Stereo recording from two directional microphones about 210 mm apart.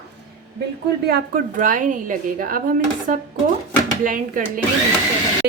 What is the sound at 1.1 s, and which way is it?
A woman's voice, 45° right (ahead or behind).